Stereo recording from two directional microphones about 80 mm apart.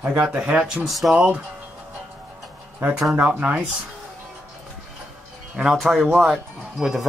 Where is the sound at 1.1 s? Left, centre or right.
Centre.